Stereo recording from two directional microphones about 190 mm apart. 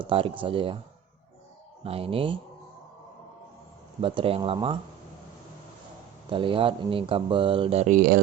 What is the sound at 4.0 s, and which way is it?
Speech, 30° right (ahead or behind).